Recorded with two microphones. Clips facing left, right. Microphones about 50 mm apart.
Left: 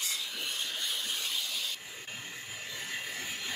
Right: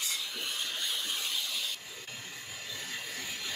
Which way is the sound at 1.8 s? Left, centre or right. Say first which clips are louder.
Left 1 dB; left.